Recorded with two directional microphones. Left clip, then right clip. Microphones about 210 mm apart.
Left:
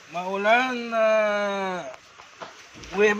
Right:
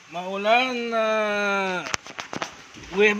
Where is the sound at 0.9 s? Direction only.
30° right (ahead or behind).